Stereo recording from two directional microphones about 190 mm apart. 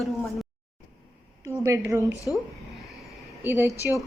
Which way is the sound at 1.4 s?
15° right (ahead or behind).